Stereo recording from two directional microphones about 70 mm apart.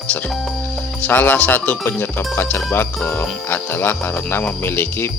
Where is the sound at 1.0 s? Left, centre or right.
Left.